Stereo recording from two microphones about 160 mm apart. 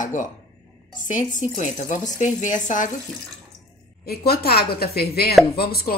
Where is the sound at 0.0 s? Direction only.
55° left (ahead or behind).